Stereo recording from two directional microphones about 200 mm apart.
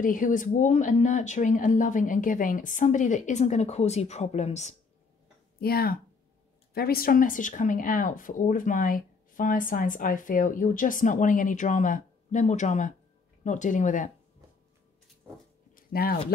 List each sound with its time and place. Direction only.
0.0 s speech: 40° left (ahead or behind)
5.6 s speech: 50° left (ahead or behind)
15.7 s a sound: 50° left (ahead or behind)